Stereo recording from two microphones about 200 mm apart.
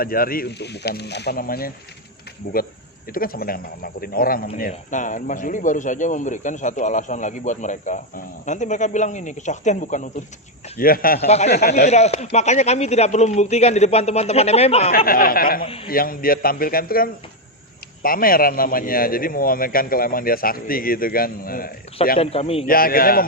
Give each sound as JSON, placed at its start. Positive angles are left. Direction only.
{"t": 0.0, "sound": "a man's voice", "side_deg": 45}
{"t": 11.3, "sound": "speech", "side_deg": 35}
{"t": 14.9, "sound": "a man's voice", "side_deg": 45}
{"t": 15.6, "sound": "a man's voice", "side_deg": 30}
{"t": 15.9, "sound": "a man's voice", "side_deg": 45}
{"t": 22.2, "sound": "a man's voice", "side_deg": 30}
{"t": 22.6, "sound": "a man's voice", "side_deg": 45}